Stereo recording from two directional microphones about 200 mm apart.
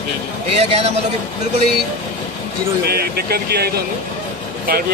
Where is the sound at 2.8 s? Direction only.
50° right (ahead or behind).